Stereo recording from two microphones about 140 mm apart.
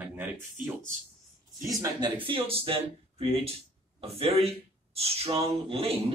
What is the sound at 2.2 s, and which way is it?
Speech, 40° right (ahead or behind).